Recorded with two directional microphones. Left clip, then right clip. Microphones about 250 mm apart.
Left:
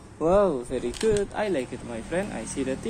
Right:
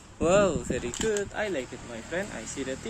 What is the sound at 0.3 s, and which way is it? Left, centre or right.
Speech, centre.